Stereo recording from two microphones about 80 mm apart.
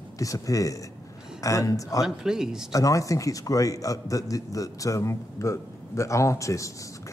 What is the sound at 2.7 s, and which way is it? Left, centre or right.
A man's voice, left.